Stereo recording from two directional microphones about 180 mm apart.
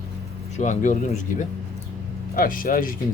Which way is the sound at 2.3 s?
50° left (ahead or behind).